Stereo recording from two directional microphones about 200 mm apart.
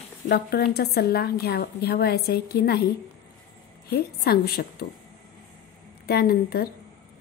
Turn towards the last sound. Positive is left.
turn(degrees=50)  # may be behind; listen again after turning